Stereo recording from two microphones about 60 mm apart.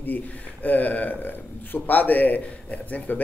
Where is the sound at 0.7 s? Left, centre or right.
Left.